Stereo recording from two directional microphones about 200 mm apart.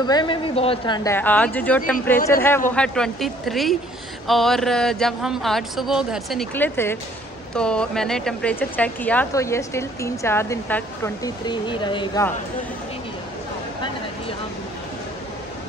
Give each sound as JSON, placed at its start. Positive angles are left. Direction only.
{"t": 0.0, "sound": "speech", "side_deg": 20}
{"t": 6.5, "sound": "speech", "side_deg": 10}